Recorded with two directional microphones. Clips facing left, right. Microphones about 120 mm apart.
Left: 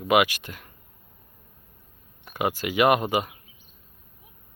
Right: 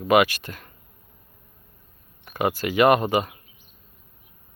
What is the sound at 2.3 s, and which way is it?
Speech, 15° left (ahead or behind).